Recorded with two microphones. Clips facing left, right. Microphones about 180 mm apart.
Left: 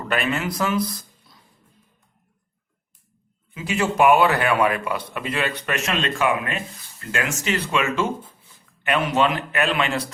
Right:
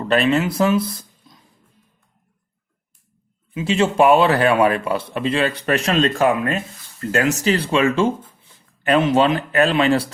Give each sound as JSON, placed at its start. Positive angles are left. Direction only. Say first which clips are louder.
{"t": 0.1, "sound": "speech", "louder": "right 7 dB", "side_deg": -30}
{"t": 3.5, "sound": "speech", "louder": "right 5 dB", "side_deg": -25}